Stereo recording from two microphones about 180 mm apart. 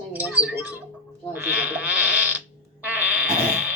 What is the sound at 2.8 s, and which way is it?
Sheep, 10° right (ahead or behind).